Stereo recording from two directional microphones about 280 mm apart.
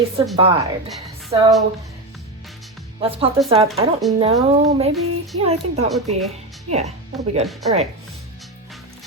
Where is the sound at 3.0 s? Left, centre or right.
Centre.